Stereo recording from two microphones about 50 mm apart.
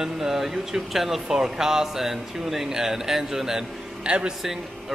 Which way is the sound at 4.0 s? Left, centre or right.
Right.